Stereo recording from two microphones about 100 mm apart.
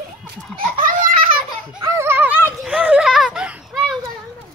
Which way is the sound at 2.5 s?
5° right (ahead or behind).